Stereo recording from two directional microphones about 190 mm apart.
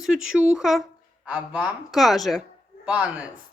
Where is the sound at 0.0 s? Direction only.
5° right (ahead or behind).